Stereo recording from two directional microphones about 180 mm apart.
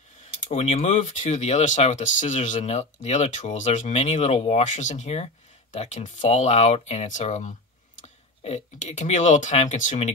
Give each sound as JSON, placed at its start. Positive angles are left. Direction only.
{"t": 0.5, "sound": "speech", "side_deg": 35}